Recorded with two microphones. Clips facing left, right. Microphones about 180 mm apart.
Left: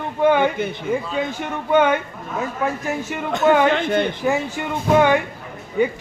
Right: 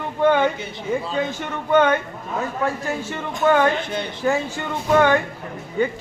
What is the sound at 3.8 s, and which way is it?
Speech, 55° left (ahead or behind).